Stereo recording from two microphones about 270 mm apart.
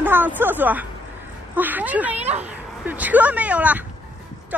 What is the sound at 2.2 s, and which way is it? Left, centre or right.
Speech, right.